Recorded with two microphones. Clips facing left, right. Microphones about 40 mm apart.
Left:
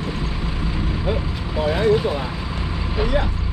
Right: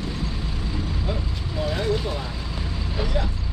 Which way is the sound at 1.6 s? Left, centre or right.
Left.